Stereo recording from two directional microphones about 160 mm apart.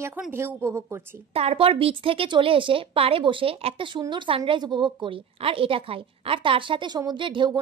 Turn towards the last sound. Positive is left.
turn(degrees=-30)  # may be behind; listen again after turning